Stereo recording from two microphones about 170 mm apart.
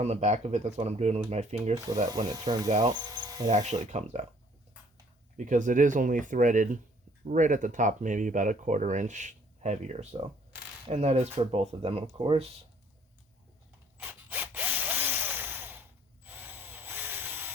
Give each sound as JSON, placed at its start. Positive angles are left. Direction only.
{"t": 0.0, "sound": "speech", "side_deg": -40}
{"t": 2.0, "sound": "speech", "side_deg": -25}
{"t": 3.5, "sound": "speech", "side_deg": -45}
{"t": 5.4, "sound": "speech", "side_deg": -45}
{"t": 14.0, "sound": "tools", "side_deg": -10}